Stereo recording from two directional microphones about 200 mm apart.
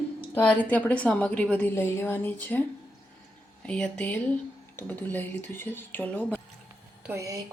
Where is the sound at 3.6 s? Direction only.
5° left (ahead or behind).